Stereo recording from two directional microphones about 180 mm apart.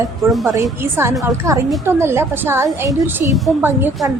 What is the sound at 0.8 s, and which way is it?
Speech, 15° right (ahead or behind).